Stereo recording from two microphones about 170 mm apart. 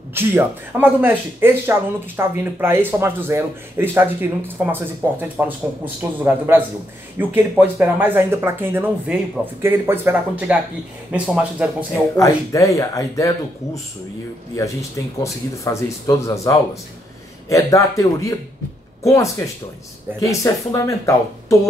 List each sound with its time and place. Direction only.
0.1 s speech: 15° right (ahead or behind)
12.2 s speech: 20° left (ahead or behind)
14.6 s speech: 20° left (ahead or behind)